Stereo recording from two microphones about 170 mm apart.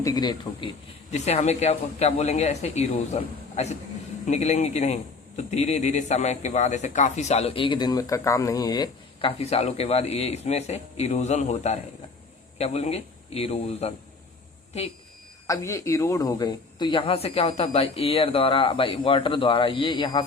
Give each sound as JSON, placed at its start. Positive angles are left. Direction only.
{"t": 0.0, "sound": "speech", "side_deg": 25}
{"t": 1.1, "sound": "speech", "side_deg": 40}
{"t": 9.4, "sound": "speech", "side_deg": 40}
{"t": 15.4, "sound": "speech", "side_deg": 20}